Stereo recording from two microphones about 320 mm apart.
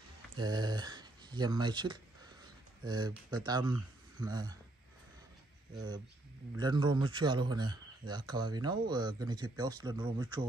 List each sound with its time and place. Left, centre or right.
0.4 s speech: centre
6.5 s speech: centre